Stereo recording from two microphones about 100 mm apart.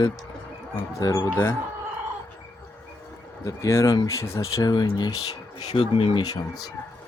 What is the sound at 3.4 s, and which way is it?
Speech, 35° left (ahead or behind).